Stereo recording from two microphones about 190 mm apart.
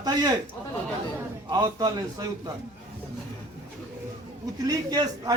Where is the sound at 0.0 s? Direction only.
20° right (ahead or behind).